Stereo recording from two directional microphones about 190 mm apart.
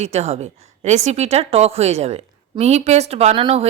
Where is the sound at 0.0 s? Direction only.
35° right (ahead or behind).